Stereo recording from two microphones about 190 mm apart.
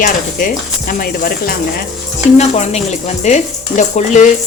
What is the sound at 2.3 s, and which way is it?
Speech, 35° left (ahead or behind).